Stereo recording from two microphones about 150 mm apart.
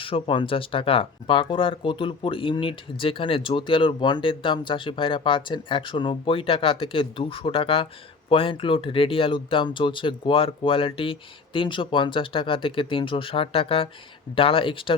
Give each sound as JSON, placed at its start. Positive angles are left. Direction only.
{"t": 0.0, "sound": "speech", "side_deg": 35}